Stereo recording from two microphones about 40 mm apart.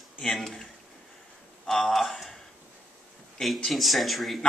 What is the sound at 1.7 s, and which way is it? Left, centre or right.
Speech, centre.